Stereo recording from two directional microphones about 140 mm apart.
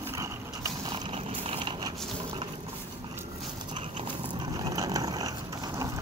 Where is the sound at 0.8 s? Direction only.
35° right (ahead or behind).